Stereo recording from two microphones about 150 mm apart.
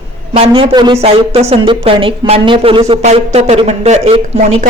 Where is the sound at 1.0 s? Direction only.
45° right (ahead or behind).